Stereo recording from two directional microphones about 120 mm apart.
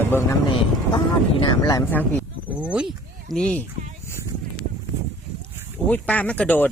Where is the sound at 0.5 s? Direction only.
45° left (ahead or behind).